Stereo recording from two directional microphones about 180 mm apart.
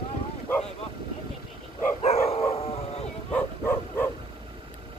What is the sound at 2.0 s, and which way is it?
Dog, 35° left (ahead or behind).